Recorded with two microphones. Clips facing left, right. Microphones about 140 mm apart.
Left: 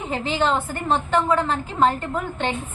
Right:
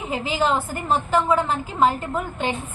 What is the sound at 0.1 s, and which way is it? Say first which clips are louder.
A woman's voice: even; 5° right (ahead or behind).